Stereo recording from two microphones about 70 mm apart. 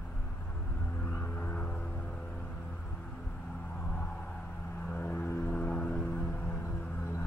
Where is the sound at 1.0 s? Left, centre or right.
Left.